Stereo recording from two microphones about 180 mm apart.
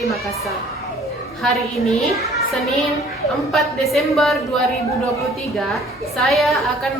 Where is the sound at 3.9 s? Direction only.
Centre (ahead or behind).